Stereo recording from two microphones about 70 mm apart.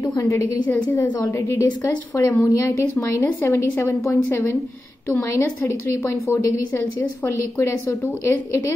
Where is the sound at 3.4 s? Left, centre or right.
Left.